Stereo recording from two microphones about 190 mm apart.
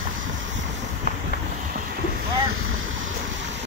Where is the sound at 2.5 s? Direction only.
90° right.